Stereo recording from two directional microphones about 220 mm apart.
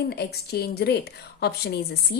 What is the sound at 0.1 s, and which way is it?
A woman's voice, 45° left (ahead or behind).